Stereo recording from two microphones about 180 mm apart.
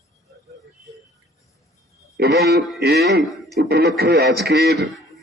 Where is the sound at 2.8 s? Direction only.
65° right (ahead or behind).